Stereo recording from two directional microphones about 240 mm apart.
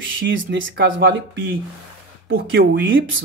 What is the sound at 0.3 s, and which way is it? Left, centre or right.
Speech, right.